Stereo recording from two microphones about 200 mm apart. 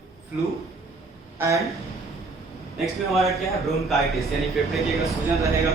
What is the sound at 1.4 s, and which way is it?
Speech, 15° right (ahead or behind).